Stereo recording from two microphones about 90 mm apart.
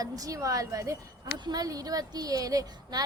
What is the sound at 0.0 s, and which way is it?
A woman's voice, 40° right (ahead or behind).